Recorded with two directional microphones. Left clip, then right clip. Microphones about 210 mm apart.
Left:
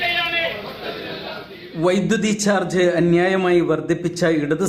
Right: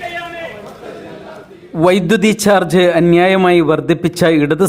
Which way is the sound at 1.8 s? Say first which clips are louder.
Right 7 dB; 40° right (ahead or behind).